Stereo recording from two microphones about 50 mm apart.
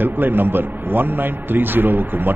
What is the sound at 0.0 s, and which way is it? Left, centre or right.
A man's voice, right.